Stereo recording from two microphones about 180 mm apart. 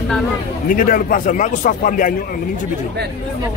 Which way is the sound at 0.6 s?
50° left (ahead or behind).